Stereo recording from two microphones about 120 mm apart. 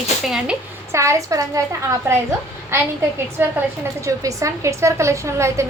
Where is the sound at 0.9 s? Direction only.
25° right (ahead or behind).